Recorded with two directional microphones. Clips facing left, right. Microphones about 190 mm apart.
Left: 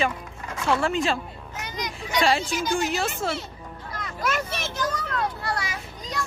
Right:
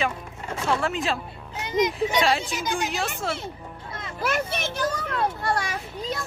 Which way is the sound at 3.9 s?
25° right (ahead or behind).